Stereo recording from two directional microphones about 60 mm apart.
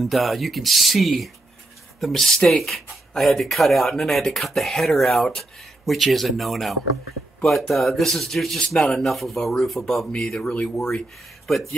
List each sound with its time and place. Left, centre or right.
0.0 s speech: centre
10.5 s speech: left
11.4 s speech: centre